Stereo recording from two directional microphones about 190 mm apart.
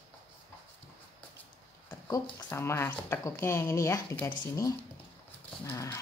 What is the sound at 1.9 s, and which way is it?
Speech, 20° left (ahead or behind).